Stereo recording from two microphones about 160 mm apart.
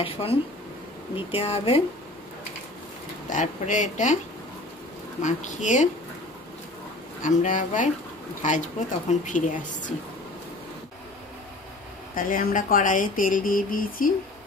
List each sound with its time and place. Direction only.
0.0 s speech: 35° left (ahead or behind)
3.3 s speech: 50° left (ahead or behind)
5.2 s speech: 50° left (ahead or behind)
7.2 s speech: 55° left (ahead or behind)
12.2 s speech: 60° left (ahead or behind)